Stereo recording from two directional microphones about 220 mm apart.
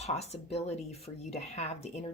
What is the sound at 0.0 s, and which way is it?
Speech, 30° left (ahead or behind).